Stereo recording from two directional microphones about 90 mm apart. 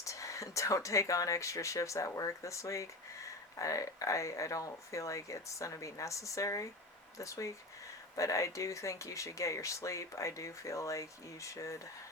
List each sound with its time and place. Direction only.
0.0 s speech: 35° left (ahead or behind)